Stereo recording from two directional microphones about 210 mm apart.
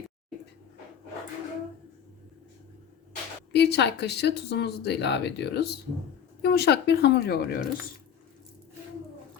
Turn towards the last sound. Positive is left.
turn(degrees=45)  # may be behind; listen again after turning